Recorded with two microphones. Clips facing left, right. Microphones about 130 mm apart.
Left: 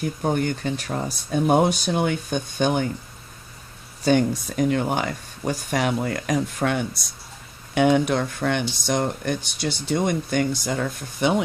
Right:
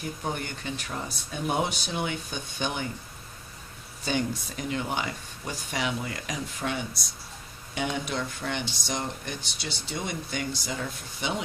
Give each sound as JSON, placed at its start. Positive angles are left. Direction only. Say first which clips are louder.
{"t": 0.2, "sound": "speech", "louder": "left 10 dB", "side_deg": 45}
{"t": 1.3, "sound": "speech", "louder": "left 10 dB", "side_deg": 50}
{"t": 4.0, "sound": "speech", "louder": "left 9 dB", "side_deg": 50}